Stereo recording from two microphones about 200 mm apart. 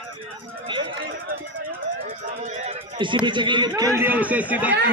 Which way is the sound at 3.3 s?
25° right (ahead or behind).